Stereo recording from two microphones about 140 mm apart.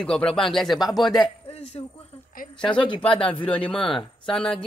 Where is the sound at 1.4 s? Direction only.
50° left (ahead or behind).